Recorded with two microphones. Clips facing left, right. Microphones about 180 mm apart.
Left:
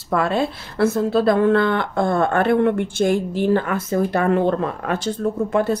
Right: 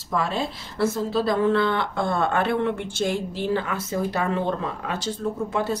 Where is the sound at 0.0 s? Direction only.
60° left (ahead or behind).